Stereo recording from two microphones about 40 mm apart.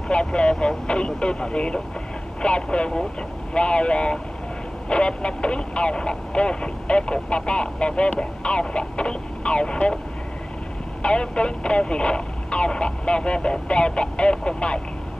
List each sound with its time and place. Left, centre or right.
0.1 s speech: left
11.0 s speech: left